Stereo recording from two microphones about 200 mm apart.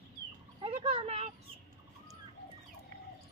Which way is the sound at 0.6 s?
30° right (ahead or behind).